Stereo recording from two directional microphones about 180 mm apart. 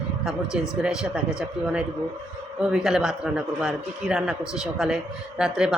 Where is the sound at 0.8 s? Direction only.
5° right (ahead or behind).